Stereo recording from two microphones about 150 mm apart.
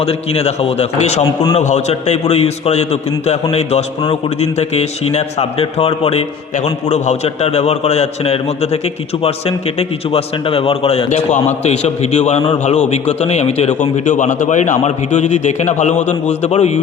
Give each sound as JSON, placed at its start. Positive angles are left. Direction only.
{"t": 0.0, "sound": "a man's voice", "side_deg": 45}